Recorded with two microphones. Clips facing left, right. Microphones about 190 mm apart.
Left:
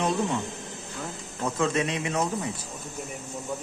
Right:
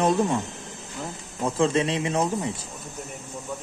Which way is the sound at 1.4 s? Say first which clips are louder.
Right 4 dB; 30° right (ahead or behind).